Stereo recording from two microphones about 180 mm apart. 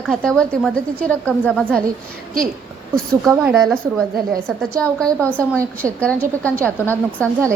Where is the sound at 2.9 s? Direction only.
5° left (ahead or behind).